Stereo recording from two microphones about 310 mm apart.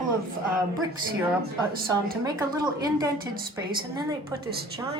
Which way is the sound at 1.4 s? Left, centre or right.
Right.